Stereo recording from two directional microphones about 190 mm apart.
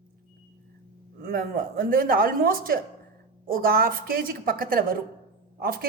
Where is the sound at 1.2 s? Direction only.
50° right (ahead or behind).